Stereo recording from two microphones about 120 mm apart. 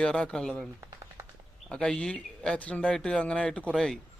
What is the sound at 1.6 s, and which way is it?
Speech, 5° left (ahead or behind).